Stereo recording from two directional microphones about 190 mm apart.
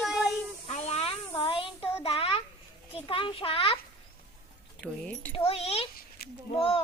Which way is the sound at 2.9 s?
30° left (ahead or behind).